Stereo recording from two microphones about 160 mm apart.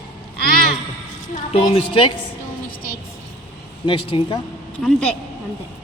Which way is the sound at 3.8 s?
30° left (ahead or behind).